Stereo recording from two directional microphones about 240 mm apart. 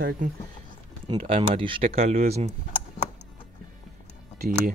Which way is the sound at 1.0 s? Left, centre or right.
Right.